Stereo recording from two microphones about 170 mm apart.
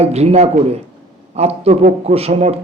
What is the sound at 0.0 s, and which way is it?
A man's voice, 40° right (ahead or behind).